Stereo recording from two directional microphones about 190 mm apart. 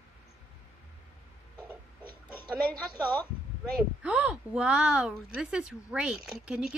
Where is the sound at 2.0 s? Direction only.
25° right (ahead or behind).